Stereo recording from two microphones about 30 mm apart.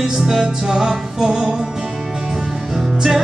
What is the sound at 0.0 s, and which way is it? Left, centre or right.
Music, centre.